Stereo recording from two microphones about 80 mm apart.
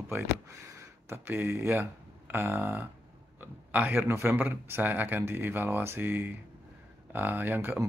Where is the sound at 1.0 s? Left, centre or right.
Right.